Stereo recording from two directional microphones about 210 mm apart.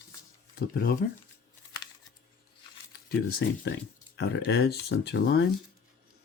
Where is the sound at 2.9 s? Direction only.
50° left (ahead or behind).